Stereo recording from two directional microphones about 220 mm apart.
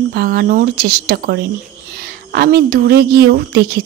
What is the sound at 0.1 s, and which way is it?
Speech, 45° right (ahead or behind).